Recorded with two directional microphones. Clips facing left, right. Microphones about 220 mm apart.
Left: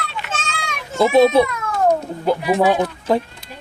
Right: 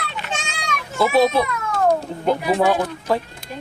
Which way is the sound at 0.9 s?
25° left (ahead or behind).